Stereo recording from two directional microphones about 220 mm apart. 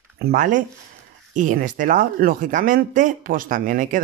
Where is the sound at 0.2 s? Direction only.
40° right (ahead or behind).